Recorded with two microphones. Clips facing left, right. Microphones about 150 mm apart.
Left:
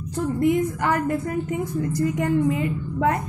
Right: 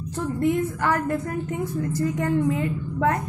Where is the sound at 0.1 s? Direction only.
15° left (ahead or behind).